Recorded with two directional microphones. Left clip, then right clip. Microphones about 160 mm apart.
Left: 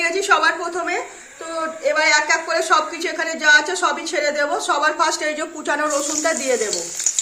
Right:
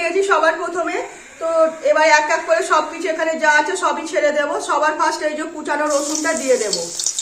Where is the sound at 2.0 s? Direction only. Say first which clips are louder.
Right 2 dB; 75° left (ahead or behind).